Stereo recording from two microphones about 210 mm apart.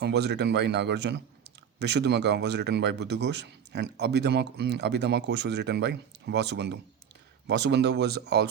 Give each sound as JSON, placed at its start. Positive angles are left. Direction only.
{"t": 0.0, "sound": "speech", "side_deg": -55}